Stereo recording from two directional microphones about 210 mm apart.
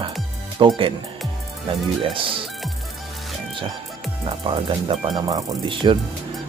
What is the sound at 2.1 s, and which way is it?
Speech, 25° right (ahead or behind).